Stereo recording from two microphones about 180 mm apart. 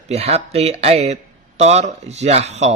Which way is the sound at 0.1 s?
35° right (ahead or behind).